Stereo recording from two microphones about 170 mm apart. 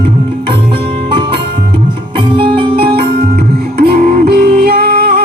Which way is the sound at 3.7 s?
65° right (ahead or behind).